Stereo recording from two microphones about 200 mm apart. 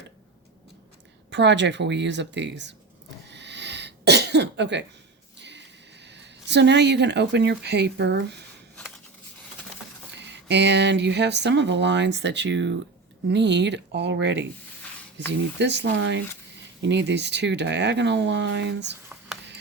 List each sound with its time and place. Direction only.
1.3 s speech: 60° right (ahead or behind)
3.2 s cough: 60° right (ahead or behind)
5.4 s speech: 60° right (ahead or behind)
10.2 s speech: 60° right (ahead or behind)